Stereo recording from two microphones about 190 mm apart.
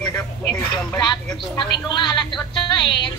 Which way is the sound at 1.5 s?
25° left (ahead or behind).